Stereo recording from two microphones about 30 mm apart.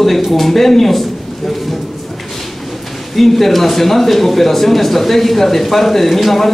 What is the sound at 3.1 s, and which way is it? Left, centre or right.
Speech, centre.